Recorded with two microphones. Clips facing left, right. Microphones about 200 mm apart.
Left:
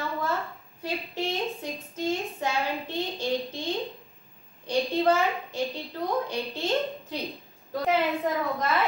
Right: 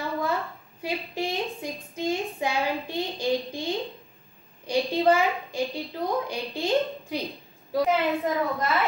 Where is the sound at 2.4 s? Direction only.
15° right (ahead or behind).